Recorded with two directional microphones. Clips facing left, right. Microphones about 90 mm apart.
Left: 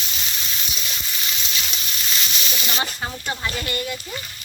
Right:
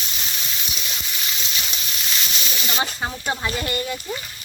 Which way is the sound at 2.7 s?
20° right (ahead or behind).